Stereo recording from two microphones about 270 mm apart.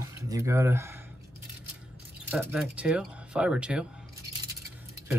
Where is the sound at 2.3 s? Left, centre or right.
Centre.